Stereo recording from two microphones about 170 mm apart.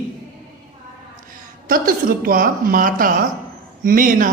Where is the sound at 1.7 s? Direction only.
60° right (ahead or behind).